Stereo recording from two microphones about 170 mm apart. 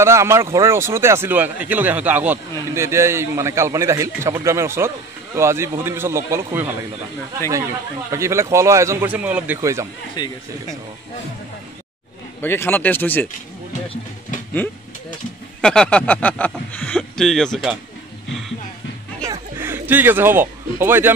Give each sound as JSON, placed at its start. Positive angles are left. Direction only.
{"t": 0.0, "sound": "a man's voice", "side_deg": -15}
{"t": 8.1, "sound": "a man's voice", "side_deg": -15}
{"t": 10.2, "sound": "speech", "side_deg": 25}
{"t": 12.4, "sound": "speech", "side_deg": 15}
{"t": 15.6, "sound": "speech", "side_deg": 5}
{"t": 19.5, "sound": "a man's voice", "side_deg": -10}